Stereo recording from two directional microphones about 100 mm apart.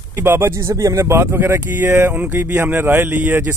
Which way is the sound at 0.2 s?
25° right (ahead or behind).